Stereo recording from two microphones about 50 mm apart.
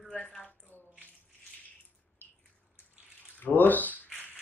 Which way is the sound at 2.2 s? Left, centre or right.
Left.